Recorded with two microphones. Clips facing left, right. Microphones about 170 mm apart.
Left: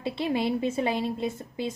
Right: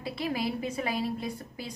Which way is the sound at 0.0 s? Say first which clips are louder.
Left 4 dB; 25° left (ahead or behind).